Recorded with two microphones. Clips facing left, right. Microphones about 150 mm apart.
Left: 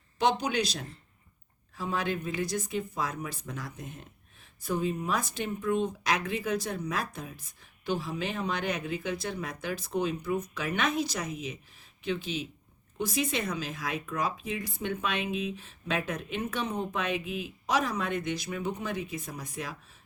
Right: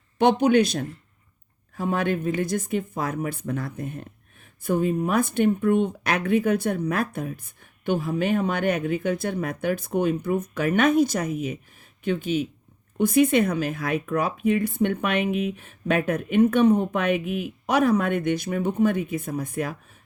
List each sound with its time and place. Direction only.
0.2 s speech: 55° right (ahead or behind)